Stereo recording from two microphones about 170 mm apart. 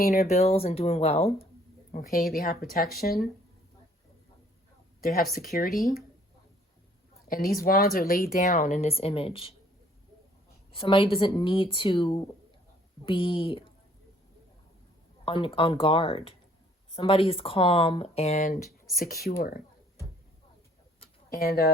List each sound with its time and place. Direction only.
0.3 s speech: 40° left (ahead or behind)
1.9 s a woman's voice: 55° left (ahead or behind)
4.9 s speech: 60° left (ahead or behind)
7.3 s speech: 55° left (ahead or behind)
8.4 s speech: 45° left (ahead or behind)
10.8 s speech: 30° left (ahead or behind)
15.2 s speech: 30° left (ahead or behind); by 18.6 s 45° left (ahead or behind)
18.9 s speech: 60° left (ahead or behind)
21.3 s speech: 65° left (ahead or behind)